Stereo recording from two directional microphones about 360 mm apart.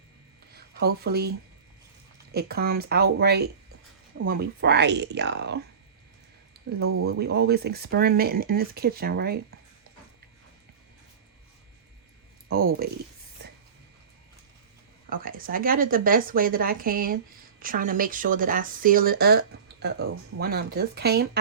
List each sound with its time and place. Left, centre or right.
0.5 s speech: right
6.7 s speech: right
12.5 s speech: right
15.1 s speech: right